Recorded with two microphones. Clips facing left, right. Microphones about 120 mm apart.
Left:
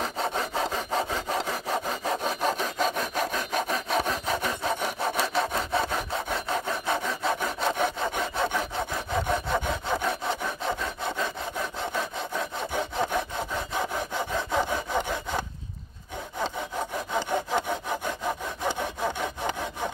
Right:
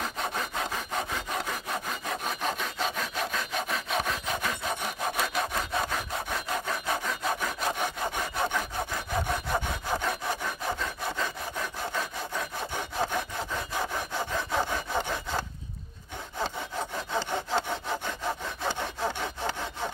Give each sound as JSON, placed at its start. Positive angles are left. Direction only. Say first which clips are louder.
{"t": 0.2, "sound": "sawing", "louder": "left 5 dB", "side_deg": 35}
{"t": 12.7, "sound": "sawing", "louder": "left 3 dB", "side_deg": 20}
{"t": 17.1, "sound": "sawing", "louder": "left 2 dB", "side_deg": 15}